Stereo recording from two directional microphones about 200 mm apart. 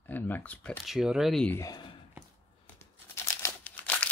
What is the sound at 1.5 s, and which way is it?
Speech, 20° left (ahead or behind).